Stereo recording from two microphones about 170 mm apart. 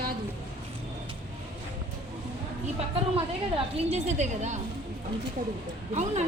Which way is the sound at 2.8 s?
35° right (ahead or behind).